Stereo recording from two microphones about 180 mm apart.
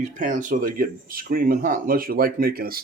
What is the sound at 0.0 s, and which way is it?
Speech, 45° right (ahead or behind).